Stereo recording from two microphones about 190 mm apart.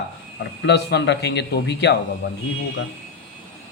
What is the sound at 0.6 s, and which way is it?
Speech, 60° left (ahead or behind).